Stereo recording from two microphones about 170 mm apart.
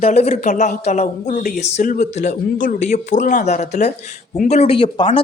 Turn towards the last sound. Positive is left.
turn(degrees=30)  # may be behind; listen again after turning